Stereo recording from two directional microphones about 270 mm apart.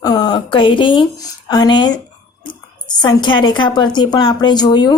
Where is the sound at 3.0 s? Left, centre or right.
Centre.